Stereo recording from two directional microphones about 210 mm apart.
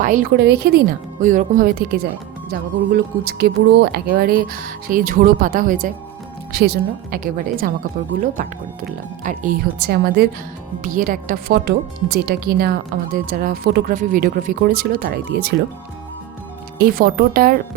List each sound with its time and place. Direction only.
0.0 s speech: 40° right (ahead or behind)
16.7 s speech: 45° right (ahead or behind)